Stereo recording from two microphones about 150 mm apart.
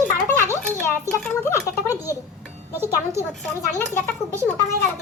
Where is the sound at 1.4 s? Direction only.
15° left (ahead or behind).